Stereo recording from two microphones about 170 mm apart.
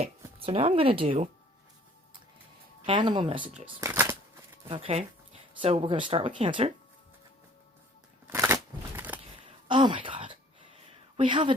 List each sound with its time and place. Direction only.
0.0 s speech: 35° right (ahead or behind)
2.8 s speech: 30° right (ahead or behind)
3.8 s speech: 15° right (ahead or behind)
4.7 s speech: 35° right (ahead or behind)
8.3 s scissors: 15° right (ahead or behind)
9.6 s a sound: 30° right (ahead or behind)
11.2 s speech: 30° right (ahead or behind)